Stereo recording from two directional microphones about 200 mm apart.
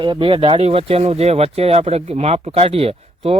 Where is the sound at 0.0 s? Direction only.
25° right (ahead or behind).